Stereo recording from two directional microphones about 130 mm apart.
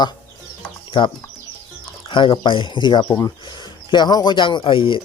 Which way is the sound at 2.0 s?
40° left (ahead or behind).